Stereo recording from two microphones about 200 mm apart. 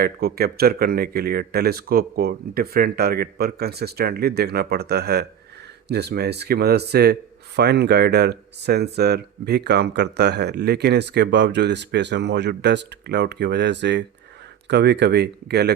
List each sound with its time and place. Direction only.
0.0 s speech: 50° right (ahead or behind)